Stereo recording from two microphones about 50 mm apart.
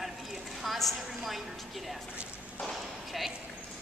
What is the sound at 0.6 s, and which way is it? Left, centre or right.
Speech, centre.